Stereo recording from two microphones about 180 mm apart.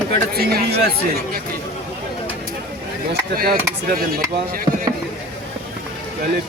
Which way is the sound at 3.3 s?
55° right (ahead or behind).